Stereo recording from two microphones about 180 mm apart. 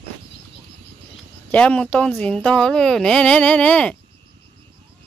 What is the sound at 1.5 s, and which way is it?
Speech, 5° left (ahead or behind).